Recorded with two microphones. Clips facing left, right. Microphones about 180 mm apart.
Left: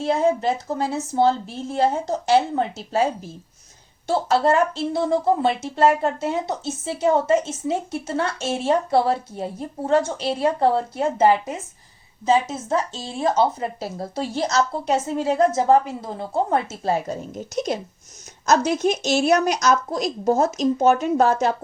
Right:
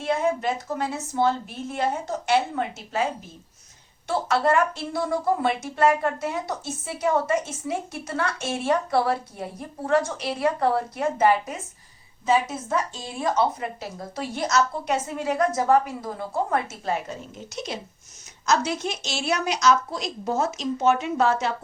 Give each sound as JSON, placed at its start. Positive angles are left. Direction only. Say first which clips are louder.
{"t": 0.0, "sound": "a woman's voice", "louder": "left 4 dB", "side_deg": 30}